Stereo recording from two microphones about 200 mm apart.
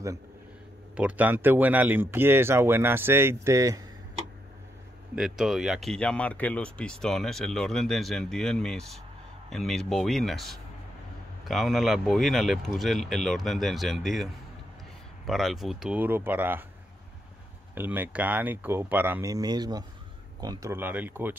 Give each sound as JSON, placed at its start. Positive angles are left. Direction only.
{"t": 0.9, "sound": "speech", "side_deg": -10}
{"t": 5.1, "sound": "speech", "side_deg": 0}
{"t": 17.7, "sound": "speech", "side_deg": -10}